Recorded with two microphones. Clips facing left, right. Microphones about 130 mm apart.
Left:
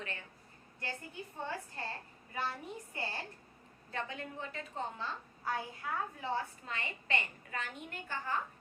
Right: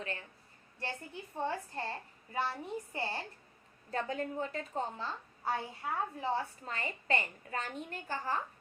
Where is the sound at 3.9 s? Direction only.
40° right (ahead or behind).